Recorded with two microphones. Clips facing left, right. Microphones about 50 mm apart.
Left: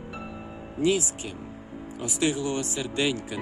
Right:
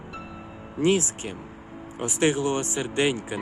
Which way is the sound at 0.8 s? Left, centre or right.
Right.